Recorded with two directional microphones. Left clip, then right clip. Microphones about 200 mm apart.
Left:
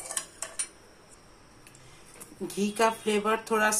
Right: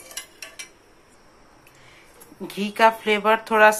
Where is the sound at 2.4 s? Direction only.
15° right (ahead or behind).